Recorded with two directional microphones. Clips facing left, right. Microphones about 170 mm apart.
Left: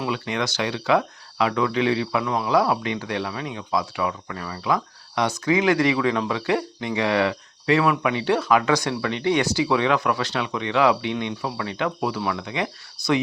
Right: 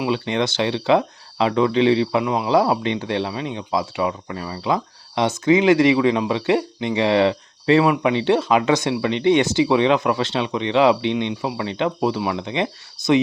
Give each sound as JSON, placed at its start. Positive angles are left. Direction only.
{"t": 0.0, "sound": "speech", "side_deg": -25}